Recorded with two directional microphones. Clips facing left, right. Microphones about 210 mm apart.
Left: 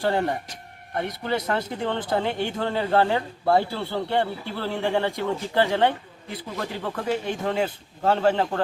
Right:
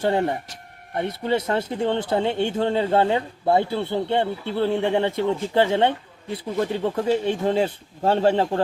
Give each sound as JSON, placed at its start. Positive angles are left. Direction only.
{"t": 0.0, "sound": "speech", "side_deg": -20}